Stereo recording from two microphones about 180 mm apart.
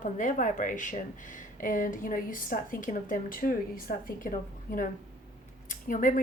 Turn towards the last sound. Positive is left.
turn(degrees=50)  # may be behind; listen again after turning